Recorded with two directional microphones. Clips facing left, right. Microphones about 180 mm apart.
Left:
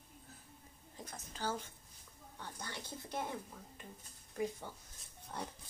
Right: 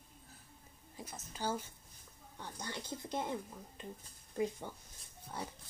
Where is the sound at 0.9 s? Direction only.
10° right (ahead or behind).